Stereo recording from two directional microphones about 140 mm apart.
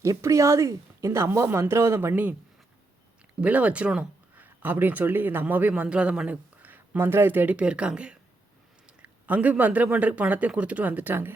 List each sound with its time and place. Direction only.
0.0 s a woman's voice: 20° right (ahead or behind)
3.4 s a man's voice: 10° right (ahead or behind)